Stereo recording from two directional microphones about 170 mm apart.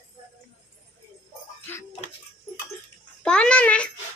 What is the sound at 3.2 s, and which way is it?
Babbling, 5° left (ahead or behind).